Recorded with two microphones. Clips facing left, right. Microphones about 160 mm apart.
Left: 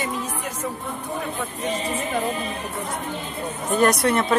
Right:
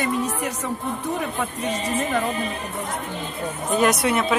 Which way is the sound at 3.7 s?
5° right (ahead or behind).